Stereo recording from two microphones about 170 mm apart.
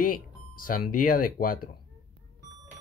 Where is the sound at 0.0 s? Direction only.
55° left (ahead or behind).